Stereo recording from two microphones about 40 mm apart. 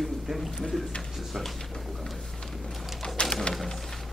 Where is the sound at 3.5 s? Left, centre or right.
Centre.